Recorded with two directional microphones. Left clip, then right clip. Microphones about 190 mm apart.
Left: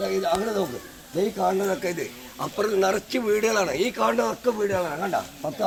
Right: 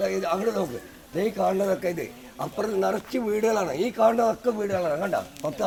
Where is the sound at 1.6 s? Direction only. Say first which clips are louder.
Even; 55° right (ahead or behind).